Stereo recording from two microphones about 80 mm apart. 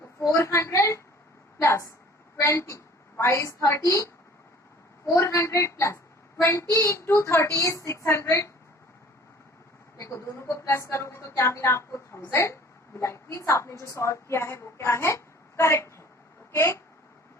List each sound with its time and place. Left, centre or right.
0.2 s a woman's voice: left
10.0 s a woman's voice: left